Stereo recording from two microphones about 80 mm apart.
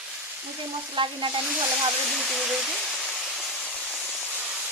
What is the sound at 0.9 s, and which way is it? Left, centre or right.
Stir, right.